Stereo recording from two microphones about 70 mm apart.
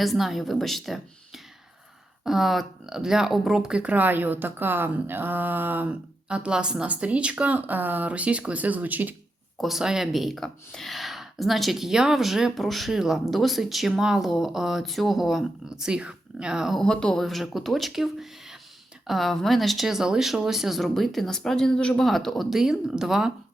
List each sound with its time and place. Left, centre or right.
0.0 s speech: centre; by 6.0 s right
6.2 s speech: centre
9.6 s speech: centre
16.7 s speech: centre